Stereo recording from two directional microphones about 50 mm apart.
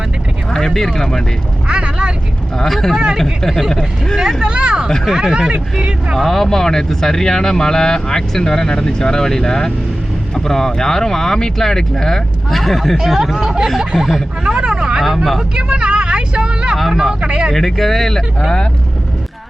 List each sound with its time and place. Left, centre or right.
0.5 s speech: centre
1.6 s vehicle: right
2.6 s speech: centre
4.2 s speech: centre
5.0 s speech: centre
5.3 s speech: centre
6.1 s speech: centre
13.0 s speech: centre
14.4 s speech: centre
15.0 s speech: centre
15.5 s vehicle: right
16.7 s speech: centre
17.2 s speech: right
17.5 s speech: centre